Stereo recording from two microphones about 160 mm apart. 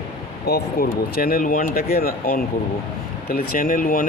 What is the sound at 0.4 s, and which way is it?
Speech, 75° left (ahead or behind).